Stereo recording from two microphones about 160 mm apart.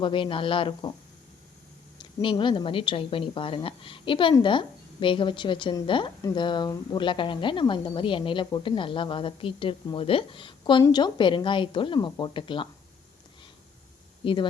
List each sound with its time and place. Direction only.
0.0 s speech: 30° left (ahead or behind)
2.0 s speech: 25° left (ahead or behind)
14.3 s speech: 30° left (ahead or behind)